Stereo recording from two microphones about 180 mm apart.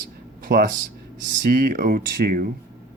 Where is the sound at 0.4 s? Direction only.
55° right (ahead or behind).